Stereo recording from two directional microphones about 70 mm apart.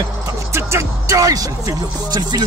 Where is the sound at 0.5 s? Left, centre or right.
Right.